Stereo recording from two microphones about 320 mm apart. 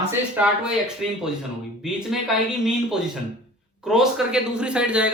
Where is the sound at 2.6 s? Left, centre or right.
Centre.